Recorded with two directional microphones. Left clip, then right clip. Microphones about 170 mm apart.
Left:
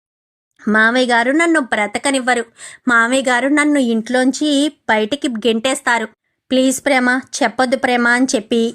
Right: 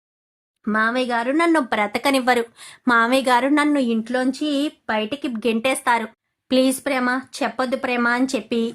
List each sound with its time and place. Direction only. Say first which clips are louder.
0.6 s speech: left 7 dB; 30° left (ahead or behind)
1.5 s speech: left 3 dB; 10° left (ahead or behind)
3.7 s speech: left 5 dB; 30° left (ahead or behind)